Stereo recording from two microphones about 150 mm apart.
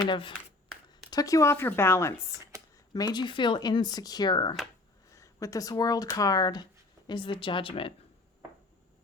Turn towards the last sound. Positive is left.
turn(degrees=35)  # may be behind; listen again after turning